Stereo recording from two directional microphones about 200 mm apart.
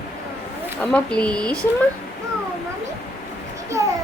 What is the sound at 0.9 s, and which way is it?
Speech, 5° left (ahead or behind).